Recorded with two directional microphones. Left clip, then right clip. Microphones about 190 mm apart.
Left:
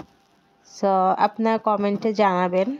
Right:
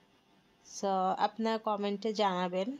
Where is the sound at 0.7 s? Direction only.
20° left (ahead or behind).